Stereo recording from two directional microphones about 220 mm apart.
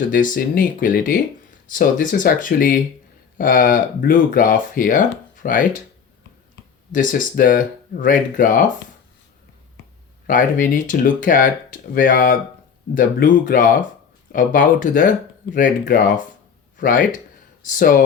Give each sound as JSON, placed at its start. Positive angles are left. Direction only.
{"t": 0.1, "sound": "speech", "side_deg": 40}
{"t": 6.9, "sound": "speech", "side_deg": 40}
{"t": 10.2, "sound": "speech", "side_deg": 35}